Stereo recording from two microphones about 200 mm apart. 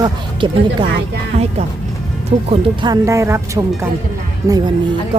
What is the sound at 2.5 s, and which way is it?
Speech, 20° right (ahead or behind).